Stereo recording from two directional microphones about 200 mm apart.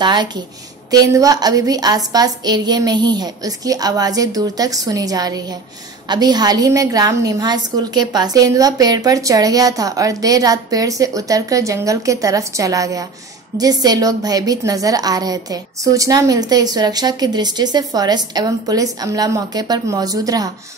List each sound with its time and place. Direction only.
0.0 s a woman's voice: 20° right (ahead or behind)